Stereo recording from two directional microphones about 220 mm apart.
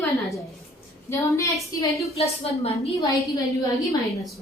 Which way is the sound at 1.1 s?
15° left (ahead or behind).